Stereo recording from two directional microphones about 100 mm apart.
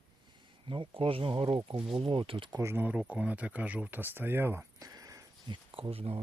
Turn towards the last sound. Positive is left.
turn(degrees=-75)  # may be behind; listen again after turning